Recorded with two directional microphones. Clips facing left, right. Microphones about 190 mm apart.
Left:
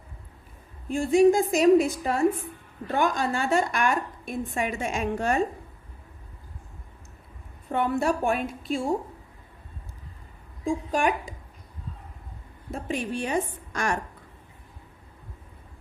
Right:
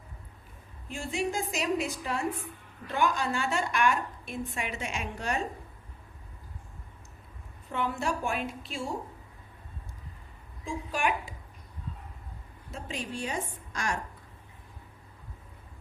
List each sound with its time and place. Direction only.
0.9 s a woman's voice: 50° left (ahead or behind)
7.7 s a woman's voice: 55° left (ahead or behind)
10.7 s a woman's voice: 45° left (ahead or behind)
12.7 s a woman's voice: 60° left (ahead or behind)